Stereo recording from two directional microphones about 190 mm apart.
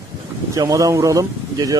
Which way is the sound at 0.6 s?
15° right (ahead or behind).